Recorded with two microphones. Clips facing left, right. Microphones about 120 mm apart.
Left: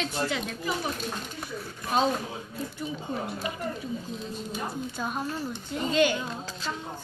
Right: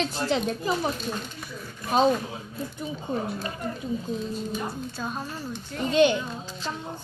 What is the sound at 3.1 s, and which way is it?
Speech, 20° right (ahead or behind).